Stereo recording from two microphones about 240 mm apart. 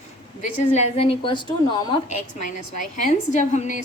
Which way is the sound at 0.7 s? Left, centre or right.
Left.